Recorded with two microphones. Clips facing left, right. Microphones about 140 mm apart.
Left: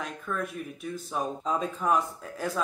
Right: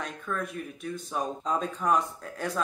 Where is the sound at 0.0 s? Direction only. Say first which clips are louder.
Even; centre (ahead or behind).